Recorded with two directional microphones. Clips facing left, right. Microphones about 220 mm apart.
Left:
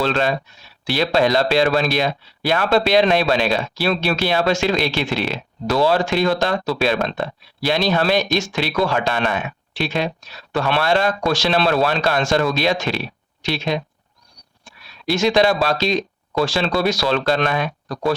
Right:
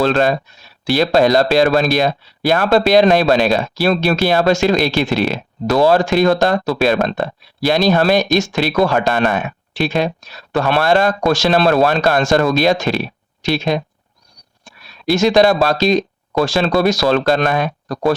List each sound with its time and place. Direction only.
0.2 s speech: 45° right (ahead or behind)
15.1 s speech: 45° right (ahead or behind)